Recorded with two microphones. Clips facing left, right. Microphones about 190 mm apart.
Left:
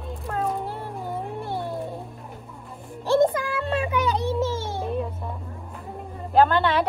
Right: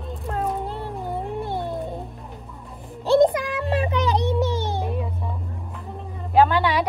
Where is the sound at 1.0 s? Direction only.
15° right (ahead or behind).